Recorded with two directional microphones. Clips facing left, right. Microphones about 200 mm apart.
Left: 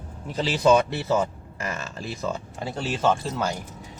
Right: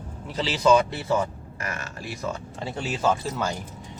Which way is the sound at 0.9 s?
25° left (ahead or behind).